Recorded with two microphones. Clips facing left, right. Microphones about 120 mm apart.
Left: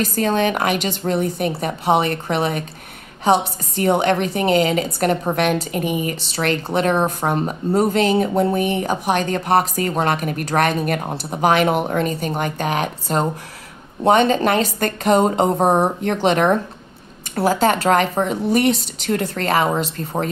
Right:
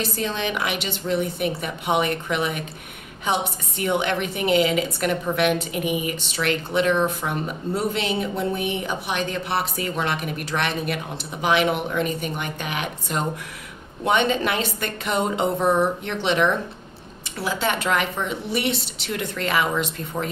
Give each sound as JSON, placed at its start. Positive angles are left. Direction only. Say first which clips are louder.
{"t": 0.0, "sound": "a woman's voice", "louder": "left 8 dB", "side_deg": 45}